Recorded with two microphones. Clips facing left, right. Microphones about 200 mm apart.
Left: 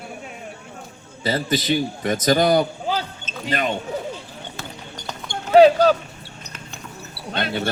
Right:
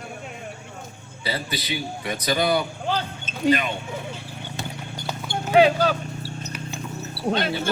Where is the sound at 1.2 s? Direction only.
45° left (ahead or behind).